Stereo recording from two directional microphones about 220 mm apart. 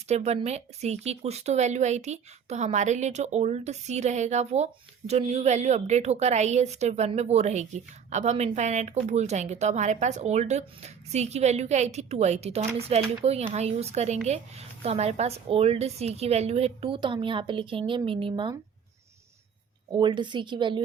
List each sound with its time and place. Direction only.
0.1 s a woman's voice: 30° right (ahead or behind)
19.9 s a woman's voice: 20° right (ahead or behind)